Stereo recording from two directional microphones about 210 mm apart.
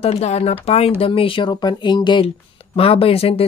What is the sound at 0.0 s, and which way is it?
Speech, 30° left (ahead or behind).